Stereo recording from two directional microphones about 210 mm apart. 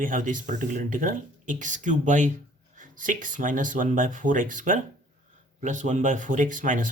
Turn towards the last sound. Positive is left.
turn(degrees=-40)  # may be behind; listen again after turning